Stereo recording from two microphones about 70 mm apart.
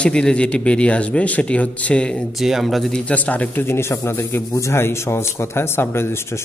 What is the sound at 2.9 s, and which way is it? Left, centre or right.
A man's voice, left.